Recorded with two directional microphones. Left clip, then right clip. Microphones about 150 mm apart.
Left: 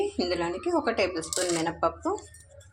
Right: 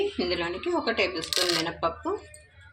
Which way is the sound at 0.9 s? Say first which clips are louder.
Right 2 dB; 45° left (ahead or behind).